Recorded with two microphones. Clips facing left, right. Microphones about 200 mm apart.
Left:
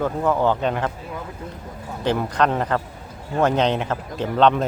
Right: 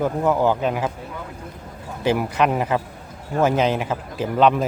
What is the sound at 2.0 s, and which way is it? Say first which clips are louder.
A man's voice: right 1 dB; 10° right (ahead or behind).